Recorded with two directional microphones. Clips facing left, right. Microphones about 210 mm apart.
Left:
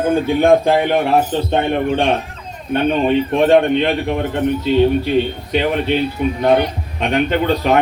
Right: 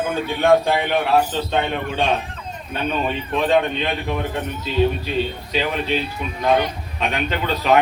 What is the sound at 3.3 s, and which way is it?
Speech, 50° left (ahead or behind).